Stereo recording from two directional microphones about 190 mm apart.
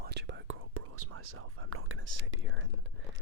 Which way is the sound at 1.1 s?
90° right.